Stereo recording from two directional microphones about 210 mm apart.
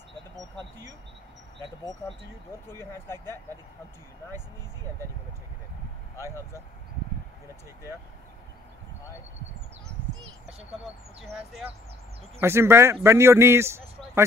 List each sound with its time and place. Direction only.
0.4 s speech: 20° right (ahead or behind)
2.0 s speech: 10° left (ahead or behind)
12.4 s a man's voice: 10° right (ahead or behind)